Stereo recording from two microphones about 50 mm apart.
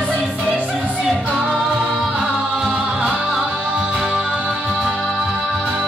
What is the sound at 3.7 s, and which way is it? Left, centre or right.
Music, centre.